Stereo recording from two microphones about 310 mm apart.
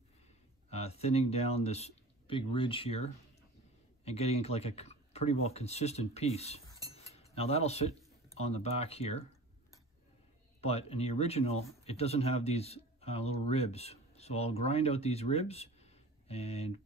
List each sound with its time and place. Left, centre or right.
0.7 s speech: centre
6.9 s cutlery: centre
8.4 s speech: centre
10.6 s speech: centre